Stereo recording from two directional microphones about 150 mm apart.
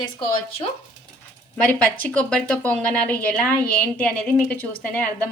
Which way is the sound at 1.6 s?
10° left (ahead or behind).